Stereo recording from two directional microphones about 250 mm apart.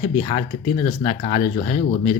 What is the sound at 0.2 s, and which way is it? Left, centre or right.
Speech, left.